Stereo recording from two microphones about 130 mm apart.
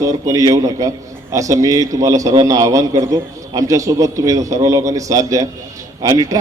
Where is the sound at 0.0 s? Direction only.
25° right (ahead or behind).